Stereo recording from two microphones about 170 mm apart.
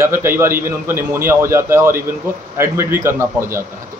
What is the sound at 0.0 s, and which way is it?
A man's voice, 15° right (ahead or behind).